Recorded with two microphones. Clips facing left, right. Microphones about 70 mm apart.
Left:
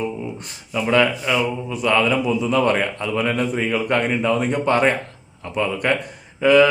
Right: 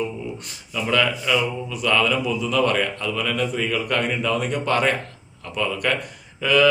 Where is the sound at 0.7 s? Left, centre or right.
Left.